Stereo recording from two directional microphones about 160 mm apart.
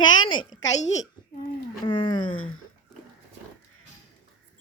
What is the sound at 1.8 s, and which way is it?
Speech, 30° left (ahead or behind).